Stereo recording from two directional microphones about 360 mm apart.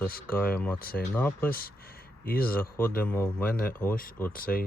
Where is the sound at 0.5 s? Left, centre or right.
Centre.